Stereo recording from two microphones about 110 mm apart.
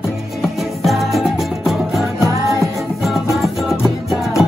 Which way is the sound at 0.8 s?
Centre (ahead or behind).